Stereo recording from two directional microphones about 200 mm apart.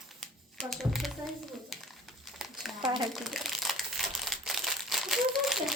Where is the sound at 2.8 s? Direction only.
25° right (ahead or behind).